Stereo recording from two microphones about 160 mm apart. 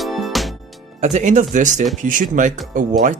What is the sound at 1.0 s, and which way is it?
Speech, 45° right (ahead or behind).